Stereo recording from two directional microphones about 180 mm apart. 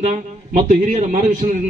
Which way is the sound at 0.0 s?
45° right (ahead or behind).